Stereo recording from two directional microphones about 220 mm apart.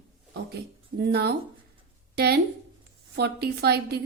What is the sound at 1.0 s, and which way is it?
A woman's voice, 45° right (ahead or behind).